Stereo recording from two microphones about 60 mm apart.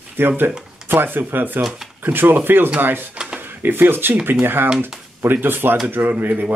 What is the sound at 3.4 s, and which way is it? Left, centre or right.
Speech, right.